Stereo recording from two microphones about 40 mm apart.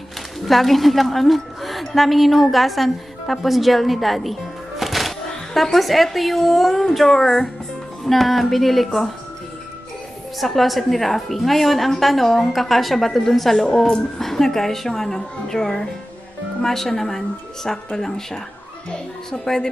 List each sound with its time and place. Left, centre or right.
0.5 s a woman's voice: centre
10.4 s a woman's voice: centre